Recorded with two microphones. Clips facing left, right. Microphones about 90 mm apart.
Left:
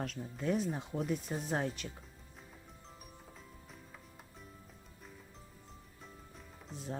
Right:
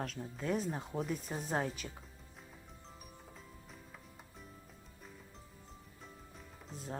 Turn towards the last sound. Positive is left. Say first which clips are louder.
# left 1 dB
turn(degrees=0)  # may be behind; listen again after turning